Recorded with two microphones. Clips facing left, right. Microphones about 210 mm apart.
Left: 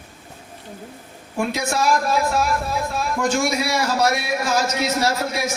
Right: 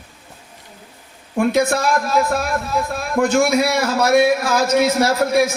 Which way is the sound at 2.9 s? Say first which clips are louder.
Right 6 dB; 55° right (ahead or behind).